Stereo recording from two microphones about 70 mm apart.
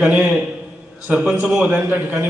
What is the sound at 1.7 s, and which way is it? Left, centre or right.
Speech, right.